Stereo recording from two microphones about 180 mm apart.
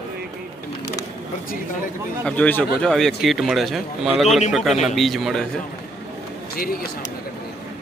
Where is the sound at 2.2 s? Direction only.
10° left (ahead or behind).